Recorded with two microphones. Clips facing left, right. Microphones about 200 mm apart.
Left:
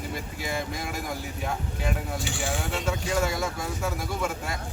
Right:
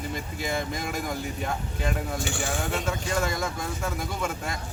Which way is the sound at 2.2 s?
50° right (ahead or behind).